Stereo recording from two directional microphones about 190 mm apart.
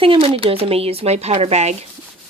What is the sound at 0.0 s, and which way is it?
Speech, 30° right (ahead or behind).